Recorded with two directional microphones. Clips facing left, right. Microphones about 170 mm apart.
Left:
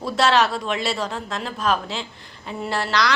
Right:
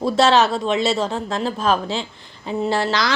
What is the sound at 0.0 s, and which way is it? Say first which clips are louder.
A woman's voice: right 4 dB; 25° right (ahead or behind).